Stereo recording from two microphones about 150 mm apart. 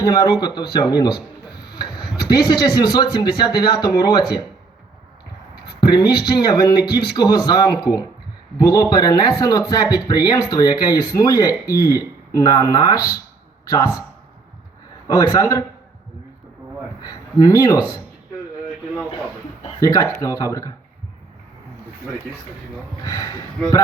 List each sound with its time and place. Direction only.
0.0 s speech: 25° left (ahead or behind)
1.7 s a sound: 30° left (ahead or behind)
2.2 s speech: 25° left (ahead or behind)
5.8 s speech: 30° left (ahead or behind)
15.0 s speech: 25° left (ahead or behind)
17.0 s speech: 25° left (ahead or behind)
19.8 s speech: 20° left (ahead or behind)
23.0 s speech: 25° left (ahead or behind)